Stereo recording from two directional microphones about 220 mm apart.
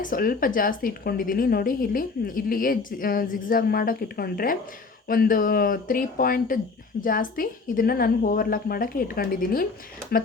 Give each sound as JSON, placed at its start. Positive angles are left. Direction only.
{"t": 0.0, "sound": "a woman's voice", "side_deg": 40}